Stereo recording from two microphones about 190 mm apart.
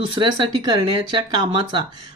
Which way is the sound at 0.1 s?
25° right (ahead or behind).